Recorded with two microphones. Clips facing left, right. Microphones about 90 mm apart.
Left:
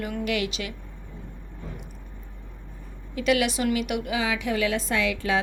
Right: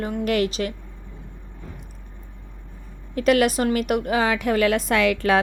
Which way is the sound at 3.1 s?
45° right (ahead or behind).